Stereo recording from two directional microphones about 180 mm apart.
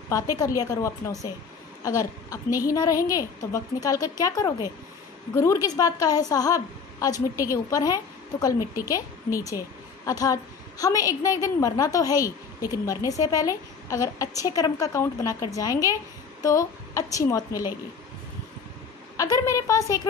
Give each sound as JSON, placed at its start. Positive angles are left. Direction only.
{"t": 0.1, "sound": "a woman's voice", "side_deg": 20}
{"t": 19.1, "sound": "a woman's voice", "side_deg": 20}